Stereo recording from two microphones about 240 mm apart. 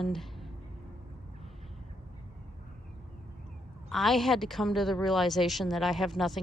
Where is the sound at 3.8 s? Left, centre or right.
Centre.